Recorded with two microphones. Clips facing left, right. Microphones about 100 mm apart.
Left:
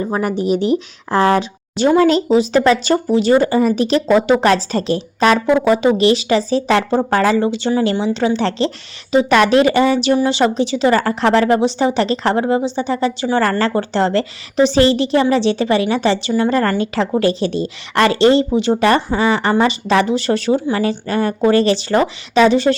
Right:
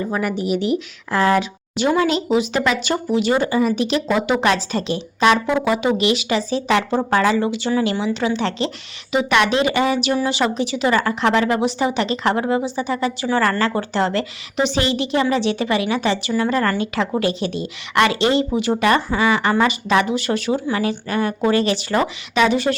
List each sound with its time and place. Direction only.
0.0 s a woman's voice: 30° left (ahead or behind)